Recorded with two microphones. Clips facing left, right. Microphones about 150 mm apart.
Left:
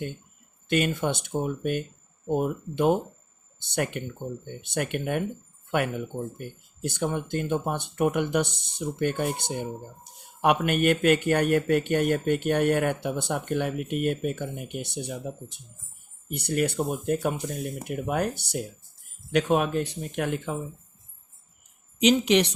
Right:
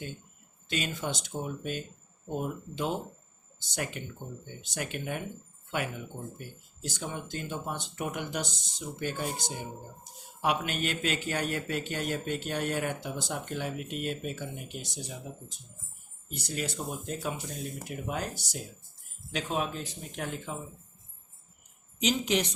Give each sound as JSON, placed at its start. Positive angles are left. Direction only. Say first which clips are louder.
{"t": 0.7, "sound": "speech", "louder": "left 8 dB", "side_deg": 55}
{"t": 6.4, "sound": "speech", "louder": "left 8 dB", "side_deg": 60}
{"t": 21.9, "sound": "speech", "louder": "left 8 dB", "side_deg": 75}